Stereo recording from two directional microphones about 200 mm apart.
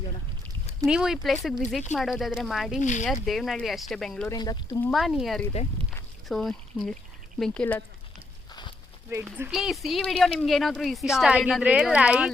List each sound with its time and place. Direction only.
0.9 s speech: 5° right (ahead or behind)
2.8 s speech: 35° left (ahead or behind)
3.1 s speech: centre (ahead or behind)
4.3 s speech: 15° left (ahead or behind)
4.8 s speech: centre (ahead or behind)
9.0 s speech: 10° right (ahead or behind)